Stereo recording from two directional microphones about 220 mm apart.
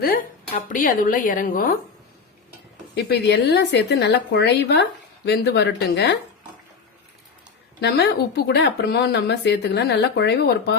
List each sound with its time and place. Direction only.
0.0 s speech: 40° left (ahead or behind)
2.9 s speech: 50° left (ahead or behind)
7.8 s a woman's voice: 50° left (ahead or behind)